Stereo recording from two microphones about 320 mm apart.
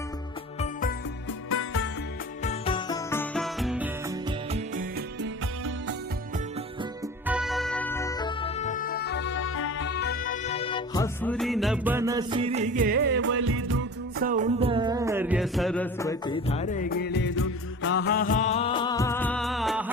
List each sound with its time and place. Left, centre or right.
0.6 s music: left
1.5 s music: left
2.4 s music: centre
7.3 s music: centre; by 13.7 s right
14.2 s music: right; by 19.8 s centre